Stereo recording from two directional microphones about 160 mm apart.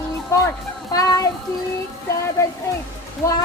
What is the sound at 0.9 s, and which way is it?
Speech, 25° left (ahead or behind).